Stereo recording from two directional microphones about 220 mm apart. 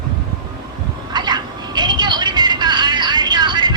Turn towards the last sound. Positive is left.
turn(degrees=-20)  # may be behind; listen again after turning